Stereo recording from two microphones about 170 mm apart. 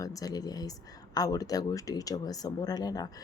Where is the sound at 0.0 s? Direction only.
20° left (ahead or behind).